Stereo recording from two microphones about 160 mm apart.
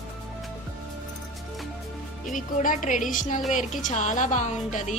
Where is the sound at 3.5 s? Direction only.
50° left (ahead or behind).